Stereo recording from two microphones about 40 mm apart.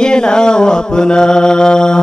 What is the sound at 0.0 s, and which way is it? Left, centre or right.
Mantra, centre.